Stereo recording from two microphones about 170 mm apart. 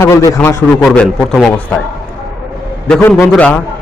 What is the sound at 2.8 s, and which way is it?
Speech, 10° left (ahead or behind).